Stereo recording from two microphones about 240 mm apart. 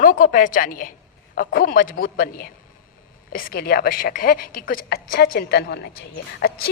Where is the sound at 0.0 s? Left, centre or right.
Left.